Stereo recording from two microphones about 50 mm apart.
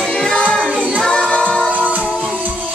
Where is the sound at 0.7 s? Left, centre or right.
Right.